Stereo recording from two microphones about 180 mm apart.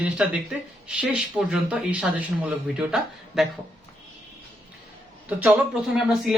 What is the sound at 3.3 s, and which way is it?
Speech, 5° right (ahead or behind).